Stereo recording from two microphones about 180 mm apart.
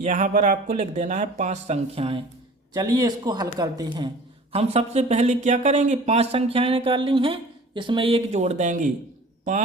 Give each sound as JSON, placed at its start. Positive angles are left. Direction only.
{"t": 0.0, "sound": "speech", "side_deg": -45}
{"t": 2.7, "sound": "speech", "side_deg": -20}